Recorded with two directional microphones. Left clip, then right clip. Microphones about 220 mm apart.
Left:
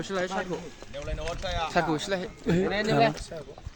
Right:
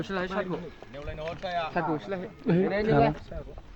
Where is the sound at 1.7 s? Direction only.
60° left (ahead or behind).